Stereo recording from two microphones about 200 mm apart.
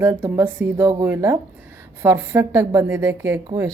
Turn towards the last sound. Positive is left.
turn(degrees=-15)  # may be behind; listen again after turning